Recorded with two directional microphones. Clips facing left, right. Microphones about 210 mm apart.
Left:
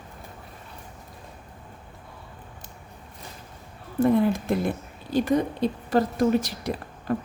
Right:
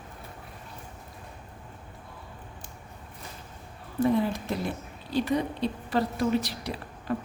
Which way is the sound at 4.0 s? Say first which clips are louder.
Left 4 dB; 55° left (ahead or behind).